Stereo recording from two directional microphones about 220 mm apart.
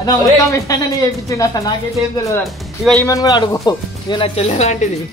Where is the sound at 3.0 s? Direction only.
15° left (ahead or behind); by 4.9 s 30° left (ahead or behind).